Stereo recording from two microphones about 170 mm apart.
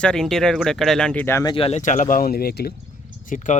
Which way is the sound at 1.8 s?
50° left (ahead or behind).